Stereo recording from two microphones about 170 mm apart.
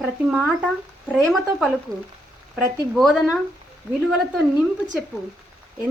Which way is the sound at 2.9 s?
Centre (ahead or behind).